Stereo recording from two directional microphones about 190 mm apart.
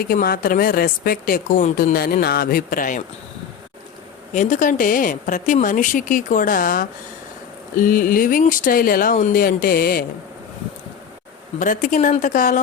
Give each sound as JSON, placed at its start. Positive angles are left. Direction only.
{"t": 0.0, "sound": "a woman's voice", "side_deg": 50}
{"t": 4.4, "sound": "a woman's voice", "side_deg": 40}
{"t": 11.6, "sound": "a woman's voice", "side_deg": 45}